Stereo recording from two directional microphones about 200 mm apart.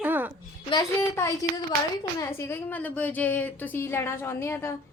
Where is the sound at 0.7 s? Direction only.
15° left (ahead or behind).